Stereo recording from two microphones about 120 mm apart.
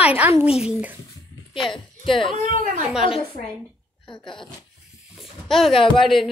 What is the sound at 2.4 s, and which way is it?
Speech, 90° right.